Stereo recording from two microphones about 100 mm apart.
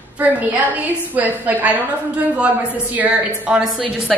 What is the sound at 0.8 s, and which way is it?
Speech, 15° right (ahead or behind).